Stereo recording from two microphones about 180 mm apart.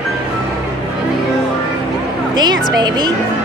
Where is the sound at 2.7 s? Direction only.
25° right (ahead or behind).